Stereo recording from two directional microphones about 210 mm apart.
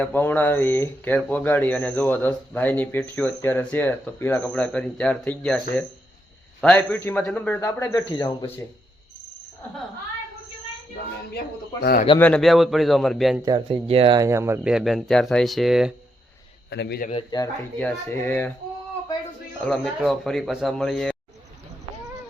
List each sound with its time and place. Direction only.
0.0 s speech: 10° left (ahead or behind)
11.3 s speech: 50° left (ahead or behind)
12.2 s speech: 5° left (ahead or behind)
13.4 s speech: 25° right (ahead or behind); by 15.9 s centre (ahead or behind)
16.6 s speech: 55° left (ahead or behind)
17.1 s speech: 25° left (ahead or behind)
17.7 s speech: 10° left (ahead or behind)
19.6 s speech: centre (ahead or behind)